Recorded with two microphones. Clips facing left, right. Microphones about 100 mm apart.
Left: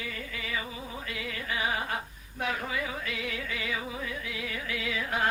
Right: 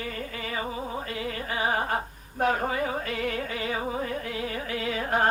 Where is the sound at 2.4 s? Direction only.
40° right (ahead or behind).